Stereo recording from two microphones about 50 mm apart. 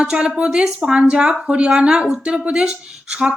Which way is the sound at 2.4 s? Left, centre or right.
Right.